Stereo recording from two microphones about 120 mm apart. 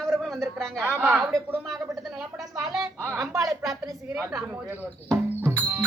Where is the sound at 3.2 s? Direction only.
Centre (ahead or behind).